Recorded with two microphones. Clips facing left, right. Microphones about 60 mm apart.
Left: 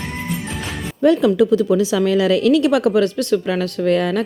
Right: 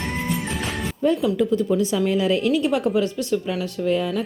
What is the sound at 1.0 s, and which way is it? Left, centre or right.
Speech, left.